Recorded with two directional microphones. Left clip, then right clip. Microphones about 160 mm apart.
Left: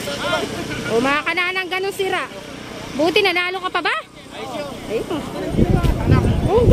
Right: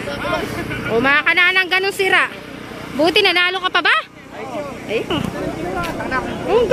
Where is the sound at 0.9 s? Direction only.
5° left (ahead or behind).